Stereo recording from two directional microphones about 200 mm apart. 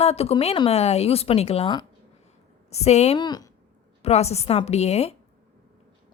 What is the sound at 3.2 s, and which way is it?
Speech, 20° left (ahead or behind).